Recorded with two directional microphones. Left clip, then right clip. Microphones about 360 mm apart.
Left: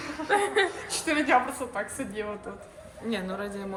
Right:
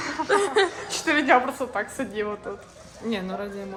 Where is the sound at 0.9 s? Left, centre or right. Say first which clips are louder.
Right 5 dB; right.